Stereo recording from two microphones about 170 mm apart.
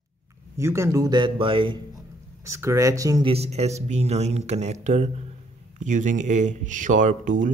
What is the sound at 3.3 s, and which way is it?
Speech, 40° right (ahead or behind).